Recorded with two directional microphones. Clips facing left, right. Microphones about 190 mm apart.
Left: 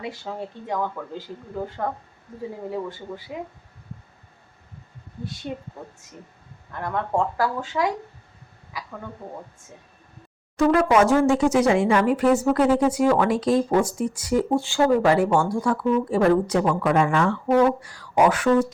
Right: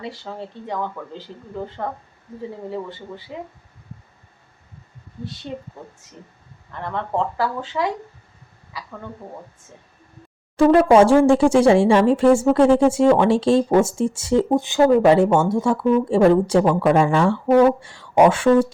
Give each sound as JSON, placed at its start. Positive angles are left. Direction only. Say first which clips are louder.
{"t": 0.0, "sound": "speech", "louder": "even", "side_deg": 5}
{"t": 3.3, "sound": "speech", "louder": "even", "side_deg": 10}
{"t": 6.7, "sound": "speech", "louder": "even", "side_deg": 5}
{"t": 10.6, "sound": "speech", "louder": "right 5 dB", "side_deg": -30}